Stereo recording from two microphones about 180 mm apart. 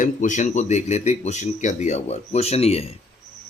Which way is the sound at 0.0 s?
45° left (ahead or behind).